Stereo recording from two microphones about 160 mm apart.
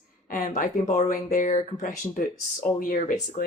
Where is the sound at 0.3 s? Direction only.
55° left (ahead or behind).